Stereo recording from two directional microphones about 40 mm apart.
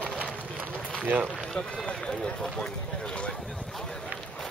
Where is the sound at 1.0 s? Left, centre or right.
Right.